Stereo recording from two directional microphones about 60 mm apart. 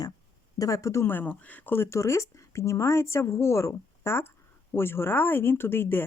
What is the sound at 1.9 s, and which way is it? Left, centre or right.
Speech, left.